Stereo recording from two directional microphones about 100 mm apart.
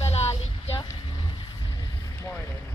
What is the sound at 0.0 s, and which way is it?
Child singing, 90° left.